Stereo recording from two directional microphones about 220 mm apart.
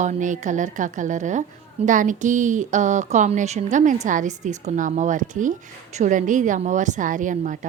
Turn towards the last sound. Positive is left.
turn(degrees=-35)  # may be behind; listen again after turning